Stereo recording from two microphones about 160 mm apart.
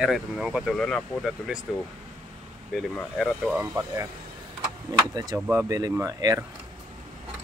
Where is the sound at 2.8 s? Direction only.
Centre (ahead or behind).